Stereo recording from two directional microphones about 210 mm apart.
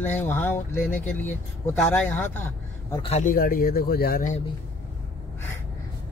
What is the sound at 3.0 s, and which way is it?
Speech, 35° left (ahead or behind).